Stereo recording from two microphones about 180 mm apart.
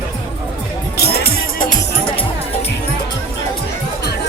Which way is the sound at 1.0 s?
60° left (ahead or behind).